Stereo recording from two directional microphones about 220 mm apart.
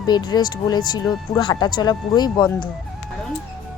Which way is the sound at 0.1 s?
20° left (ahead or behind).